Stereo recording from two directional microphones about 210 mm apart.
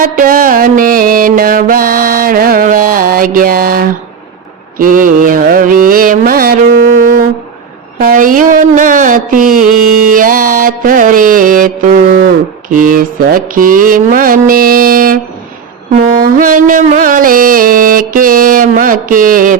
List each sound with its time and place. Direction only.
0.0 s mantra: 45° right (ahead or behind)
4.8 s music: 40° right (ahead or behind)
7.9 s mantra: 40° right (ahead or behind)